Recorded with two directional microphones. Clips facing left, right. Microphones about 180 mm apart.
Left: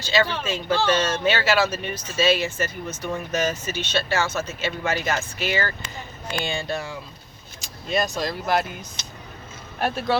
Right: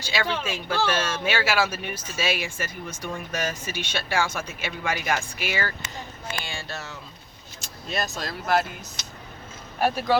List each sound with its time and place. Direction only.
0.0 s speech: 10° right (ahead or behind)
6.4 s speech: 20° left (ahead or behind)
7.6 s speech: centre (ahead or behind)
9.8 s speech: 5° right (ahead or behind)